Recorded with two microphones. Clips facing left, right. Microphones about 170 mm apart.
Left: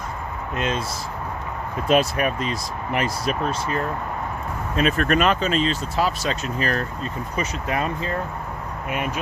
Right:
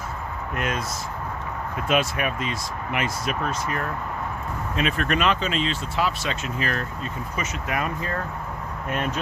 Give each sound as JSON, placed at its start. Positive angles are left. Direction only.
{"t": 0.5, "sound": "speech", "side_deg": 25}
{"t": 1.9, "sound": "speech", "side_deg": 35}
{"t": 4.8, "sound": "speech", "side_deg": 45}
{"t": 8.9, "sound": "speech", "side_deg": 10}